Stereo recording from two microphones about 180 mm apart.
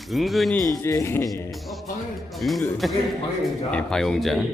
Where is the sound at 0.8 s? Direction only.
15° left (ahead or behind).